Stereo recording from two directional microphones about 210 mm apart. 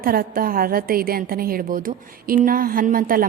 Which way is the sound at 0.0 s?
45° right (ahead or behind).